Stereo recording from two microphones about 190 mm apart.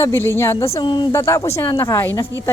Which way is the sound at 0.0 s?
15° left (ahead or behind).